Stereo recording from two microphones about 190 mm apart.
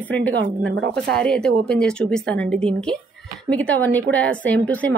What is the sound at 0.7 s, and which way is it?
Speech, 55° right (ahead or behind).